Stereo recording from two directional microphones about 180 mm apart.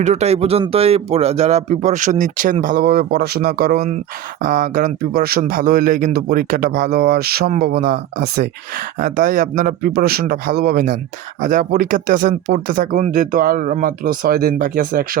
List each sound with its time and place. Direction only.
0.0 s speech: 40° right (ahead or behind); by 8.4 s 60° right (ahead or behind)
9.0 s speech: 50° right (ahead or behind)